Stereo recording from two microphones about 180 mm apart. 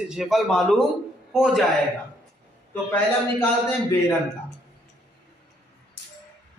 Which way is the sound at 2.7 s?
10° left (ahead or behind).